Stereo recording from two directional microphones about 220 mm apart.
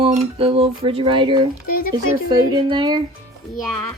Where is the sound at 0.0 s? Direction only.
25° right (ahead or behind).